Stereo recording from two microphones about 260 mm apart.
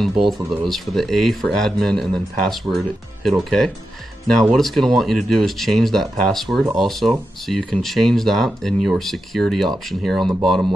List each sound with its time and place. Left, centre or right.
0.5 s speech: centre